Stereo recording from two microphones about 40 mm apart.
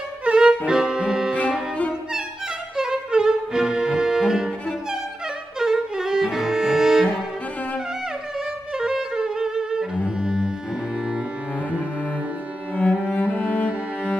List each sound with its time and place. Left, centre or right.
0.2 s music: right
2.9 s music: centre
5.6 s music: centre
8.7 s music: centre
10.0 s cello: centre
12.7 s cello: left